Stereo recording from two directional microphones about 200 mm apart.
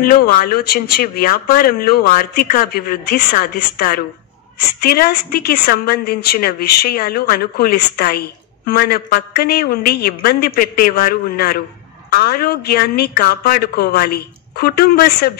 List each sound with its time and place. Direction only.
0.0 s a woman's voice: 45° left (ahead or behind)